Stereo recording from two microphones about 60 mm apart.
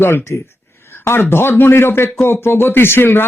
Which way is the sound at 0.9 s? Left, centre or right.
Left.